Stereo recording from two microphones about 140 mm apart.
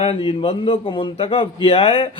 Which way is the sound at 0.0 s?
45° left (ahead or behind).